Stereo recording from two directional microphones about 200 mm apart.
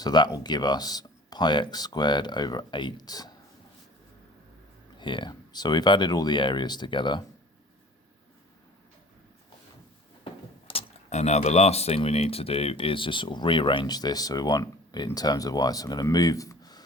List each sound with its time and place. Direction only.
0.0 s speech: 20° left (ahead or behind)
4.9 s speech: 25° left (ahead or behind)
10.7 s speech: 30° left (ahead or behind)